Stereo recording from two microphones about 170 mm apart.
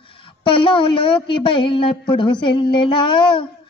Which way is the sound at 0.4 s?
30° left (ahead or behind).